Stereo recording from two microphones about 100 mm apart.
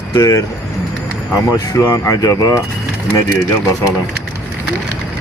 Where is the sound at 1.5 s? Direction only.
35° left (ahead or behind).